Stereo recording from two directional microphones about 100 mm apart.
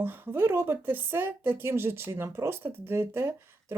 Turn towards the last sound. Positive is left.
turn(degrees=-25)  # may be behind; listen again after turning